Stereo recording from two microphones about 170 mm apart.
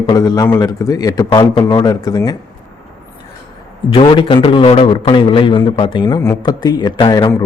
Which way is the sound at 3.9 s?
30° left (ahead or behind).